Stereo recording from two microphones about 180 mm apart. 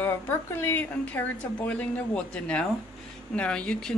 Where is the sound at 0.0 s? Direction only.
15° left (ahead or behind).